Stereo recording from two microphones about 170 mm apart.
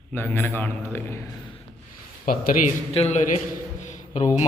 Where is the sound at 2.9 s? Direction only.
40° left (ahead or behind).